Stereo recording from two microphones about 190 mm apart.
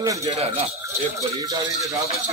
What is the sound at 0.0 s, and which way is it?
A man's voice, 15° right (ahead or behind).